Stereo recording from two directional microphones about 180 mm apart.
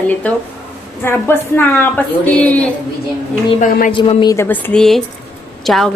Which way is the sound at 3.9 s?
30° left (ahead or behind).